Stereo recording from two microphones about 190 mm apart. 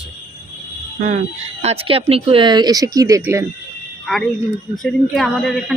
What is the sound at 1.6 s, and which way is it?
Speech, 30° right (ahead or behind).